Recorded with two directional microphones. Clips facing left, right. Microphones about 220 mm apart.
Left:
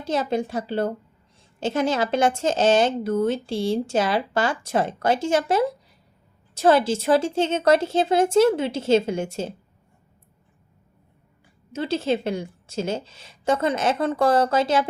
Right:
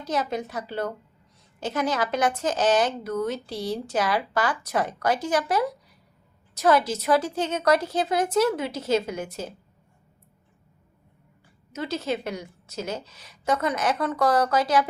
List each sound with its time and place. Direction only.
0.0 s speech: 30° left (ahead or behind)
11.7 s speech: 30° left (ahead or behind)